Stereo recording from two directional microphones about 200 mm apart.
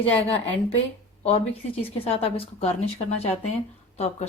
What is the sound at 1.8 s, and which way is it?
A woman's voice, 30° left (ahead or behind).